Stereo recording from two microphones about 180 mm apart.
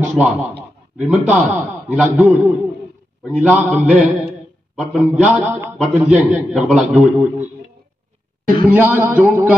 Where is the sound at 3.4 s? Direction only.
5° right (ahead or behind).